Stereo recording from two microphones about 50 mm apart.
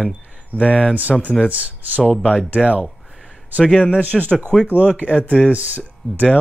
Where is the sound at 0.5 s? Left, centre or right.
Left.